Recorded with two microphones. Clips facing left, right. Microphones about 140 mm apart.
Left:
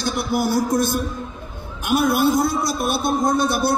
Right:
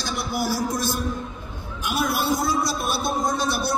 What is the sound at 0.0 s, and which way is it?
A man's voice, 55° left (ahead or behind).